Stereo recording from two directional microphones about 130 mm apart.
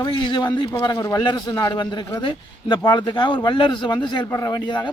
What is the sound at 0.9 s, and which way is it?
Speech, 20° left (ahead or behind).